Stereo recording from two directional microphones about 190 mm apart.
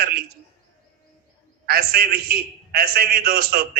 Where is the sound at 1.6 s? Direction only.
55° right (ahead or behind).